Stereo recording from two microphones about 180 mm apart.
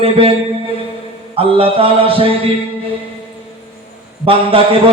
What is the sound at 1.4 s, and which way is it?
Speech, 30° right (ahead or behind).